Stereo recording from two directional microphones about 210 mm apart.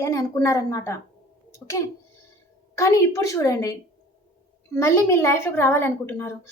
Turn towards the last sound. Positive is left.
turn(degrees=10)  # may be behind; listen again after turning